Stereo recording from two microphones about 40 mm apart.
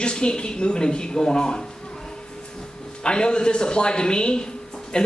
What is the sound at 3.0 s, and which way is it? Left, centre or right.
A man's voice, left.